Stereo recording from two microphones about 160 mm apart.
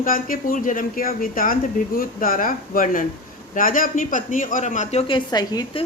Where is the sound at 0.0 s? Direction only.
60° left (ahead or behind); by 5.8 s 25° left (ahead or behind).